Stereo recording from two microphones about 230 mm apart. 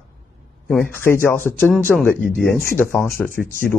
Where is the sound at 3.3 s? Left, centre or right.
Left.